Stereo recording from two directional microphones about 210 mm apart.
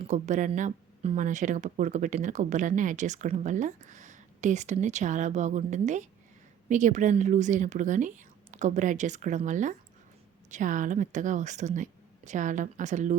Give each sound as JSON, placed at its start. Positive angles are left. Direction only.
{"t": 0.0, "sound": "speech", "side_deg": -35}